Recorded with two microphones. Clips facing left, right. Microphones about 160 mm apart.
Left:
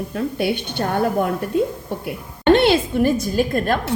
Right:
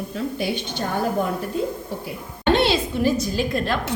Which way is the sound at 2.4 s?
55° left (ahead or behind).